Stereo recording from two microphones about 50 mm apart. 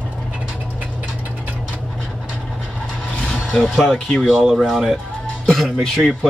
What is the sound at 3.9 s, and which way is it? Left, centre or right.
Speech, centre.